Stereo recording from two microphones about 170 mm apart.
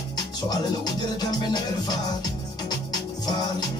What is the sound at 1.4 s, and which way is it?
Music, 25° left (ahead or behind).